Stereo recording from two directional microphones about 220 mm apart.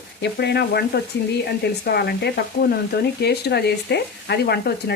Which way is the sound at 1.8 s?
45° left (ahead or behind).